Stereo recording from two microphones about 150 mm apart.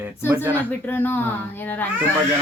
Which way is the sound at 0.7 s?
15° left (ahead or behind).